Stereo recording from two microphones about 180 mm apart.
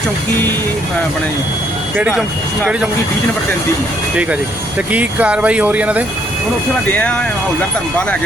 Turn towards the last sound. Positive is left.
turn(degrees=10)  # may be behind; listen again after turning